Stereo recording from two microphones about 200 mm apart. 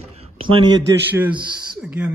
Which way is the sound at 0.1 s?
25° right (ahead or behind).